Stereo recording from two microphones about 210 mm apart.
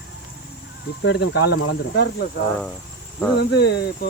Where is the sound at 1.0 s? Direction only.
55° left (ahead or behind).